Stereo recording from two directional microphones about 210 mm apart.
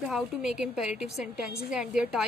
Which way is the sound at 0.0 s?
Centre (ahead or behind).